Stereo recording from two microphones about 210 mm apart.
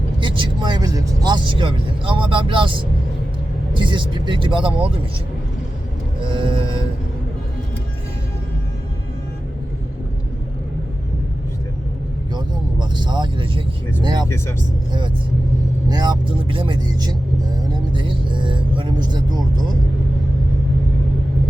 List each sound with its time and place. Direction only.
0.2 s speech: 25° right (ahead or behind)
6.1 s vehicle: 25° right (ahead or behind)
12.8 s speech: 20° right (ahead or behind)
14.3 s speech: 10° left (ahead or behind)
15.9 s vehicle: 20° right (ahead or behind)